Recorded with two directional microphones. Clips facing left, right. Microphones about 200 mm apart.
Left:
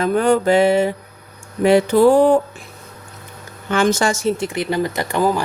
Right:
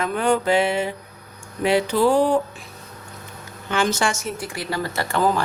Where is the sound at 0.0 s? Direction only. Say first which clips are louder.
Left 5 dB; 40° left (ahead or behind).